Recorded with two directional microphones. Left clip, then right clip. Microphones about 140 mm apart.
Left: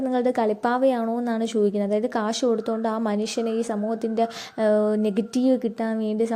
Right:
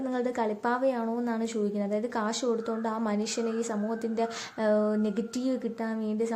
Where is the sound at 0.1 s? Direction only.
40° left (ahead or behind).